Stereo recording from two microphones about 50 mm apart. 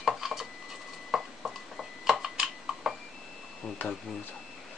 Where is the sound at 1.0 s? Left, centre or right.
Centre.